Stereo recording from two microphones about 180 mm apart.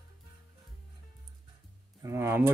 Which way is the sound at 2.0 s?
15° right (ahead or behind).